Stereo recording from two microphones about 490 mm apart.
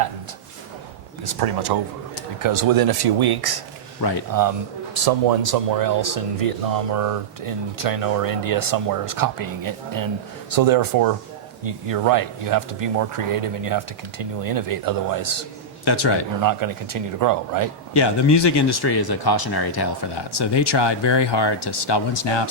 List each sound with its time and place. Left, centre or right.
1.2 s speech: right
15.8 s a man's voice: left
16.4 s speech: right
17.9 s speech: left